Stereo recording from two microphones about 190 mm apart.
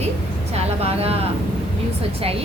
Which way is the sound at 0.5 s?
35° right (ahead or behind).